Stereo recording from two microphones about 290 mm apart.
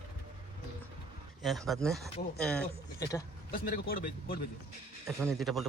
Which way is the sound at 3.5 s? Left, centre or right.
Left.